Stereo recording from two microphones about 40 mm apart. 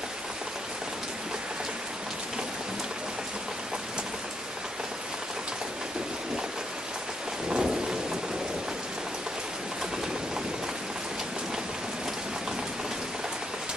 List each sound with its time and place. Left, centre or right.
7.4 s thunder: right